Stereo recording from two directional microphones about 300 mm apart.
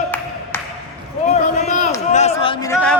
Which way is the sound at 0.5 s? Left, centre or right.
Centre.